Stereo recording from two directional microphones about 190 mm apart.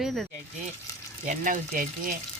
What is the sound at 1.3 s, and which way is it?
Speech, 45° right (ahead or behind).